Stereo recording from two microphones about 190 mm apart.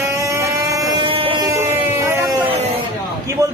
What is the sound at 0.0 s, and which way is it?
Motorboat, 15° right (ahead or behind).